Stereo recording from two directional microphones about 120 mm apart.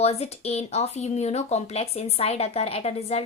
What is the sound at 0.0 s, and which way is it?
Speech, 60° left (ahead or behind).